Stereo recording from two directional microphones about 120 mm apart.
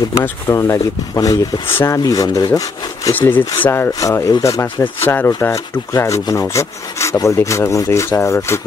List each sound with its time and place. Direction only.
0.2 s speech: 25° left (ahead or behind)
3.2 s speech: 15° left (ahead or behind)